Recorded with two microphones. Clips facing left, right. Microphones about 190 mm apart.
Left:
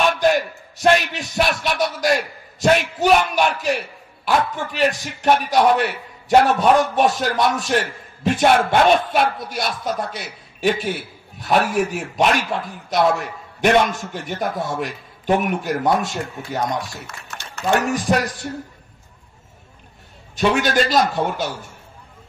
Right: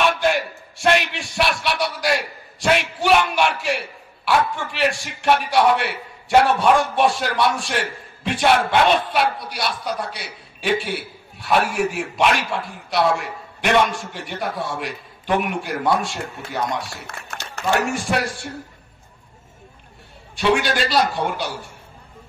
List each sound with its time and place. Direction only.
0.2 s a sound: 40° left (ahead or behind)
1.4 s a man's voice: 45° left (ahead or behind)
18.1 s a man's voice: 40° left (ahead or behind)
20.3 s a man's voice: 45° left (ahead or behind)